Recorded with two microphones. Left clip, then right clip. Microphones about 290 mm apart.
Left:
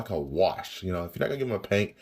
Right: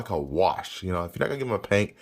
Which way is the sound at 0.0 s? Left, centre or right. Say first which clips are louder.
Right 2 dB; centre.